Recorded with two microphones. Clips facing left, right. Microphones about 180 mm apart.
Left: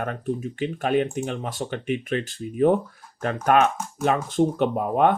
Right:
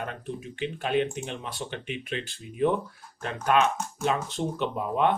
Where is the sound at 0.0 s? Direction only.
50° left (ahead or behind).